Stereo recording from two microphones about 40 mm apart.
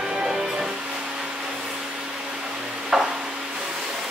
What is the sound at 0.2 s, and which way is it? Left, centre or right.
Music, right.